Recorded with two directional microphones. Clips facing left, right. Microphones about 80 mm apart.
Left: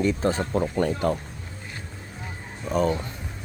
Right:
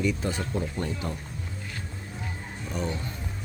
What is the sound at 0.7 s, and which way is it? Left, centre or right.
Speech, left.